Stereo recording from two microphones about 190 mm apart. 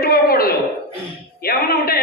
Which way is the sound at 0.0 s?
50° left (ahead or behind).